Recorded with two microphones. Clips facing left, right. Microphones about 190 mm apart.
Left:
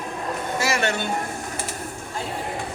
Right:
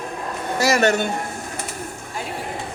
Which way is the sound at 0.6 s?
40° right (ahead or behind).